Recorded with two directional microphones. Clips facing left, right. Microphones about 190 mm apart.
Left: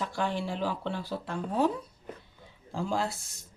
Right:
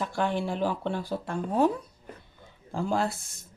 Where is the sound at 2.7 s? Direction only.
55° right (ahead or behind).